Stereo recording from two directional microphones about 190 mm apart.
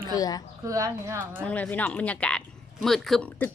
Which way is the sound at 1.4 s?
5° left (ahead or behind).